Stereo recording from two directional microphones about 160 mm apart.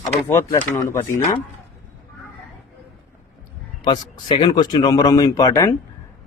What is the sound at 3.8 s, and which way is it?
A man's voice, 25° left (ahead or behind).